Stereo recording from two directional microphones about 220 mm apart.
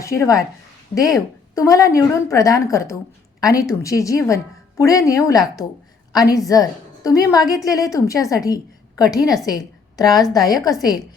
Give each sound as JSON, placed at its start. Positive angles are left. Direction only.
{"t": 0.0, "sound": "a woman's voice", "side_deg": 15}